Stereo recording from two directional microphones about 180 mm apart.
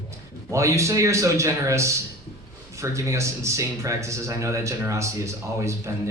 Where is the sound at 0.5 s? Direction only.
15° right (ahead or behind).